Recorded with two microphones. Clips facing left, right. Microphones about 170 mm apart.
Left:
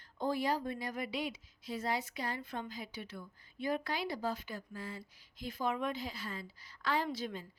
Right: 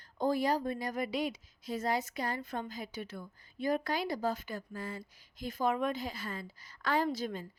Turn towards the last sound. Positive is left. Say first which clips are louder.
# right 4 dB
turn(degrees=-45)  # may be behind; listen again after turning